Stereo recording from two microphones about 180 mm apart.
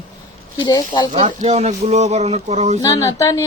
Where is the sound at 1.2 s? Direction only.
35° right (ahead or behind).